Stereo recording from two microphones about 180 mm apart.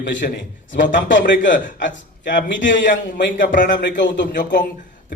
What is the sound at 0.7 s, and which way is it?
Speech, 85° left.